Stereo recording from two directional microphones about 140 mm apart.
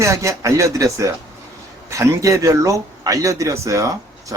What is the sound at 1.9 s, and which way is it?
Speech, 25° right (ahead or behind).